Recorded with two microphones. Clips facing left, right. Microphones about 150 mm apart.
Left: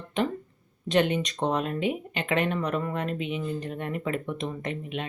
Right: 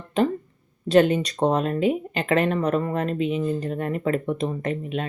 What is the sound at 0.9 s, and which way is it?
Speech, 40° right (ahead or behind).